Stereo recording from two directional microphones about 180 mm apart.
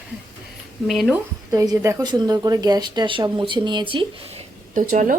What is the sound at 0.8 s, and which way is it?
Speech, centre (ahead or behind).